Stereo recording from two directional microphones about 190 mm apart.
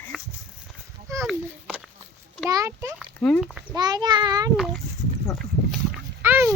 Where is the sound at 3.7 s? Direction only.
20° right (ahead or behind).